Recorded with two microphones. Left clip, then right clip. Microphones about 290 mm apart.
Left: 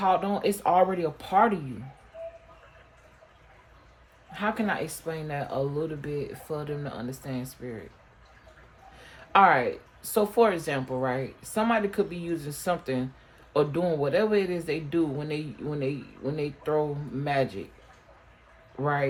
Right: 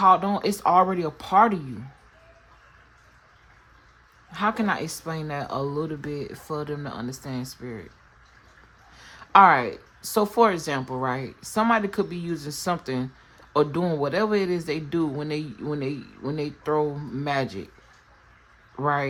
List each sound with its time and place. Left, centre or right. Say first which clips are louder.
0.0 s speech: right 6 dB; right
4.3 s speech: right 4 dB; right
9.0 s speech: right 5 dB; right
18.8 s speech: right 4 dB; right